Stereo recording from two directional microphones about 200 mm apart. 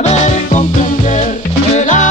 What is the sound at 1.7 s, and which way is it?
Music, 40° left (ahead or behind).